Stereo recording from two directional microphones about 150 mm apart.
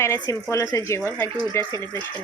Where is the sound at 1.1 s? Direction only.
15° left (ahead or behind).